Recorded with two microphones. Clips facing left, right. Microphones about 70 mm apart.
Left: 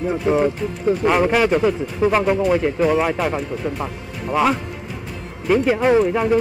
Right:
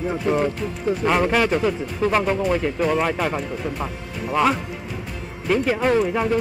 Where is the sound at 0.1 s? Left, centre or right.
Centre.